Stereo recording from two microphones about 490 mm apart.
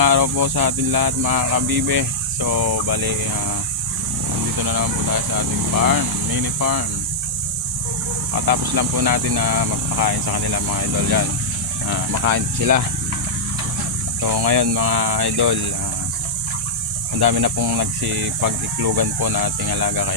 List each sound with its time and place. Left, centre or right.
0.0 s speech: right
4.5 s speech: right
8.4 s speech: right
14.2 s speech: right
17.2 s speech: right